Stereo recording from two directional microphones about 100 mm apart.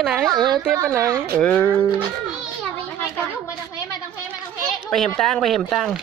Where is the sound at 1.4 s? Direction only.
15° left (ahead or behind).